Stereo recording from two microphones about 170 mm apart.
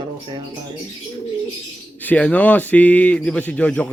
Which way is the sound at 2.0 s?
10° left (ahead or behind).